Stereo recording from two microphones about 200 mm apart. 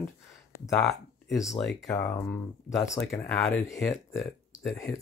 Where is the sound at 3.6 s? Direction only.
15° left (ahead or behind).